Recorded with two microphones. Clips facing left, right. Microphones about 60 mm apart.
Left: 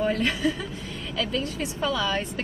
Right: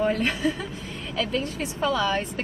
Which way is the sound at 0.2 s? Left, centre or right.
Right.